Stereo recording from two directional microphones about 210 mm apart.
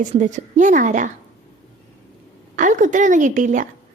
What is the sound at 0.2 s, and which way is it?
Speech, 35° right (ahead or behind).